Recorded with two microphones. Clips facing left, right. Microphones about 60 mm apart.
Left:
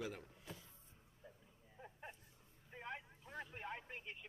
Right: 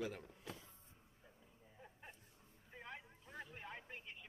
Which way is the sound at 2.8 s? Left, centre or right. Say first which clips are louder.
Left 4 dB; left.